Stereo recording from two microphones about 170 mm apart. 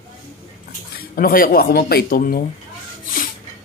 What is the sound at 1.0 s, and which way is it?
Speech, 60° left (ahead or behind).